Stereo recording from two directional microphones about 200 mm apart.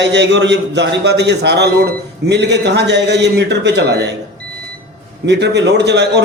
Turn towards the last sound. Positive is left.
turn(degrees=-60)  # may be behind; listen again after turning